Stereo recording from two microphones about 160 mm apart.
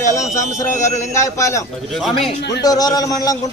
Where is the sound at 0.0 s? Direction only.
20° left (ahead or behind).